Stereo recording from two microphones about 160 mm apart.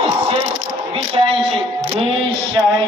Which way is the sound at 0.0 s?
35° right (ahead or behind).